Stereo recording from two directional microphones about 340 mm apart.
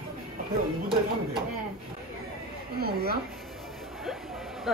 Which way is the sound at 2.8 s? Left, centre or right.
Right.